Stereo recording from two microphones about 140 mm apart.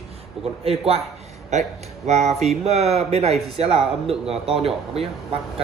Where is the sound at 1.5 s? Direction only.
55° right (ahead or behind).